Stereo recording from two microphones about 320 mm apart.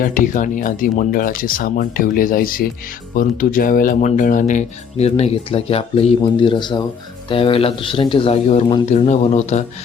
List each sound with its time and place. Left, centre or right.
0.0 s speech: left